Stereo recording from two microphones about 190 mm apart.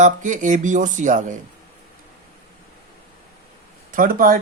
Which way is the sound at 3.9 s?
45° right (ahead or behind).